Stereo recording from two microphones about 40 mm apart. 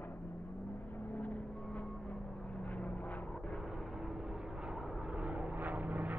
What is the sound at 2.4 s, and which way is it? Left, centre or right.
Vehicle, left.